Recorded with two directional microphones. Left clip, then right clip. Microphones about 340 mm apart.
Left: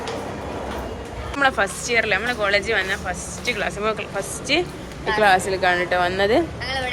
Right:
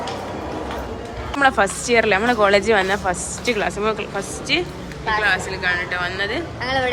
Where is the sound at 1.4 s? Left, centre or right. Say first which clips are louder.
Right 3 dB; centre.